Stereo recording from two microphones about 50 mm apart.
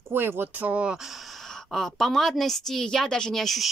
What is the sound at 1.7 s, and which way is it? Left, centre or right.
Speech, centre.